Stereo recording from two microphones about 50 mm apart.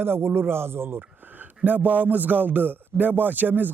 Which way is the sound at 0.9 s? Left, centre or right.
Right.